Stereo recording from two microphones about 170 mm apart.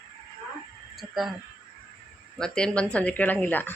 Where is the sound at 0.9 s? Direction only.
Centre (ahead or behind).